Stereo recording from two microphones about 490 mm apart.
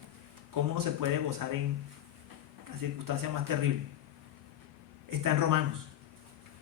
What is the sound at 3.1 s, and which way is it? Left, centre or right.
Speech, right.